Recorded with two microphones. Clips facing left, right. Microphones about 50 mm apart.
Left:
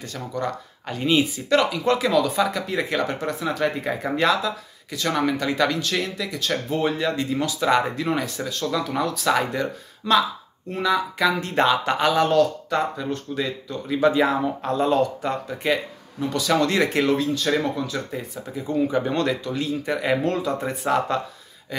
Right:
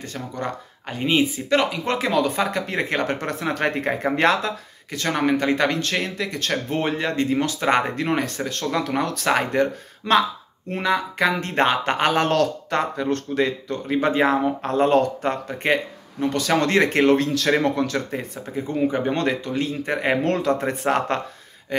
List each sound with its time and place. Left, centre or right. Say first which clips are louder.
0.0 s speech: left 1 dB; right
12.3 s speech: left 1 dB; right
13.8 s speech: even; right
17.3 s speech: right 2 dB; right
18.6 s speech: even; right
20.2 s speech: right 3 dB; right